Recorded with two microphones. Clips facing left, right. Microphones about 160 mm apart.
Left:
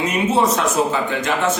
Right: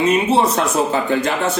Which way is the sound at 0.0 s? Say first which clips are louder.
Right 3 dB; 30° right (ahead or behind).